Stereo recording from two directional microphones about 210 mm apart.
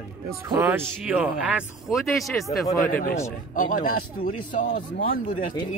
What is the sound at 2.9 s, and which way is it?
A man's voice, 45° left (ahead or behind).